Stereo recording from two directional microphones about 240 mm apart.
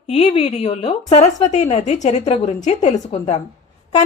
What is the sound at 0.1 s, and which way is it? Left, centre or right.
A woman's voice, left.